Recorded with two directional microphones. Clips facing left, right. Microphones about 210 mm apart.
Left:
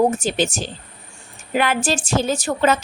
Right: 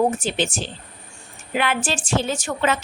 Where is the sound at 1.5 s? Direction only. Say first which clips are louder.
Left 3 dB; 40° left (ahead or behind).